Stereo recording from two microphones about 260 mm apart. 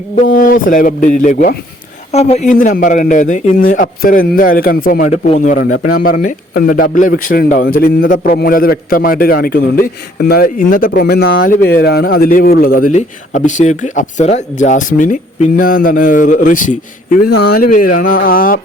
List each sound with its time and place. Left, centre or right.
0.3 s a man's voice: left